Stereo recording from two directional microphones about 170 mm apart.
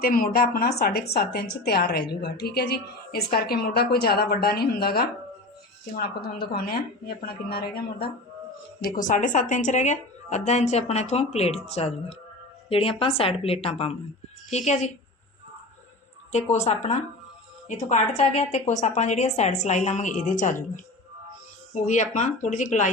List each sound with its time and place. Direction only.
0.0 s a woman's voice: 55° left (ahead or behind)
8.8 s a woman's voice: 50° left (ahead or behind)
16.3 s a woman's voice: 40° left (ahead or behind)
21.8 s a woman's voice: 45° left (ahead or behind)